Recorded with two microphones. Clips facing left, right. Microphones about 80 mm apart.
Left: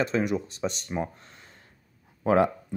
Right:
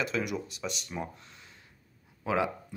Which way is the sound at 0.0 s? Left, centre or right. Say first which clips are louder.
Left 6 dB; left.